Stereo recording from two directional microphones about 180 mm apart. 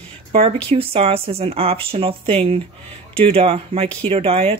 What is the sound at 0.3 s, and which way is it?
Speech, 30° right (ahead or behind).